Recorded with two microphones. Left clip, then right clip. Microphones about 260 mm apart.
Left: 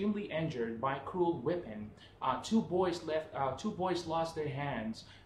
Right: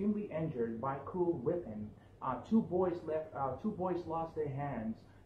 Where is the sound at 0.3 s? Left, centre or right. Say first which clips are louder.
Left 1 dB; left.